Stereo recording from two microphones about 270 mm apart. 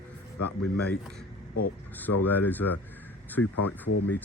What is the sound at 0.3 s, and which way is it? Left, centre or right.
Speech, left.